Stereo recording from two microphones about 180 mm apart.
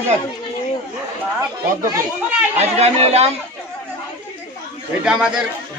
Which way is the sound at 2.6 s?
35° right (ahead or behind).